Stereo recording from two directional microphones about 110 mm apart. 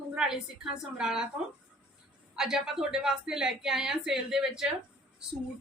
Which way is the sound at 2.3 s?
5° right (ahead or behind).